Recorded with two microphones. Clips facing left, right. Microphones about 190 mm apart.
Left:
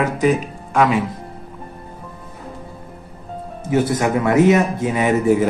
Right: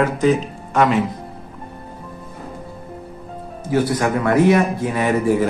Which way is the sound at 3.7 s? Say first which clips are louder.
Left 1 dB; 20° left (ahead or behind).